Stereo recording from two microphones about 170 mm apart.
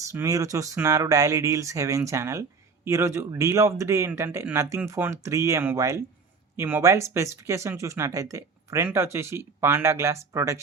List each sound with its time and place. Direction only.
0.1 s speech: 20° right (ahead or behind)